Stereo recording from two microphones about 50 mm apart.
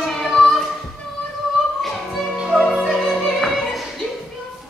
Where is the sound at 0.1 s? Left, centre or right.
Centre.